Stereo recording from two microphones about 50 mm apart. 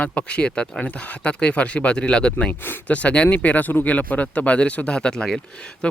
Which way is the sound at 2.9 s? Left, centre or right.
Left.